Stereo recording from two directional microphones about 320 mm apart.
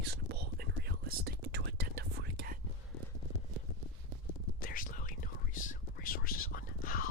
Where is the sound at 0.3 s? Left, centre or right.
Right.